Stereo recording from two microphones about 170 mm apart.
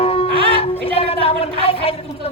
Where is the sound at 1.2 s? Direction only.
35° left (ahead or behind).